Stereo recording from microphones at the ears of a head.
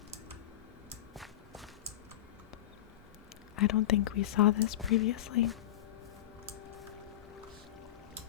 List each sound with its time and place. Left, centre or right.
3.5 s speech: left